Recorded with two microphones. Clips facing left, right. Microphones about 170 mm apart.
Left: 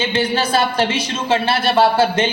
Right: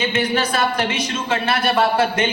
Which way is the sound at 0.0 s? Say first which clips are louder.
Left 1 dB; 30° left (ahead or behind).